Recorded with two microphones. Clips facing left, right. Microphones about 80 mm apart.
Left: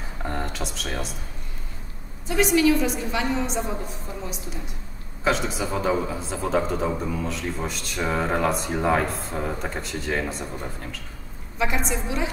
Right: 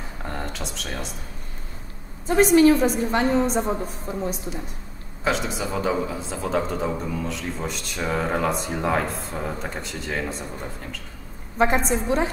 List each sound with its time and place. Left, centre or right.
0.2 s a sound: centre
2.2 s a woman's voice: right
5.2 s a man's voice: centre
11.5 s a woman's voice: right